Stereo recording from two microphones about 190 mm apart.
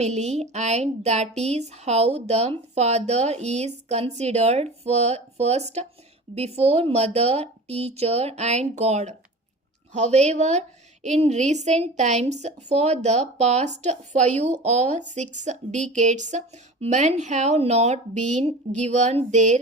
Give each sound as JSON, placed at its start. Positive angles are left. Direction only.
{"t": 0.0, "sound": "speech", "side_deg": -35}